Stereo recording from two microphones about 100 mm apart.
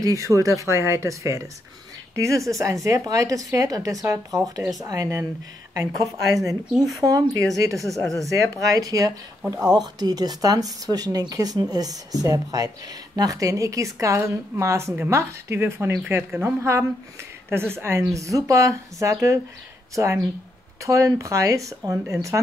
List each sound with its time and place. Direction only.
0.0 s a woman's voice: 30° right (ahead or behind)